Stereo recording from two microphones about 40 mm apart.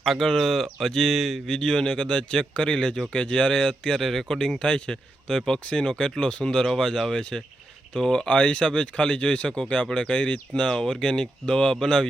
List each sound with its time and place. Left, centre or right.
0.0 s speech: centre
1.5 s speech: centre
7.2 s speech: left
8.3 s speech: left